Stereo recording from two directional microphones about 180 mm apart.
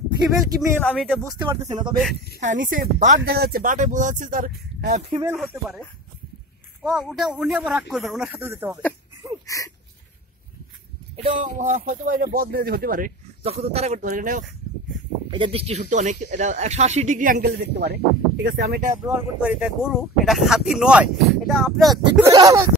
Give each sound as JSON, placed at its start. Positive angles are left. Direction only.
{"t": 0.6, "sound": "speech", "side_deg": 5}
{"t": 1.2, "sound": "speech", "side_deg": -15}
{"t": 2.5, "sound": "speech", "side_deg": -50}
{"t": 5.1, "sound": "speech", "side_deg": -15}
{"t": 6.8, "sound": "speech", "side_deg": 0}
{"t": 8.4, "sound": "speech", "side_deg": -15}
{"t": 9.5, "sound": "speech", "side_deg": 20}
{"t": 11.5, "sound": "speech", "side_deg": -45}
{"t": 12.4, "sound": "speech", "side_deg": -60}
{"t": 13.4, "sound": "speech", "side_deg": -35}
{"t": 15.3, "sound": "speech", "side_deg": -30}
{"t": 19.0, "sound": "speech", "side_deg": -10}
{"t": 22.2, "sound": "speech", "side_deg": -20}